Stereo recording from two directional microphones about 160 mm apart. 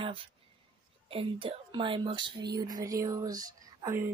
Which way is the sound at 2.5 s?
25° right (ahead or behind).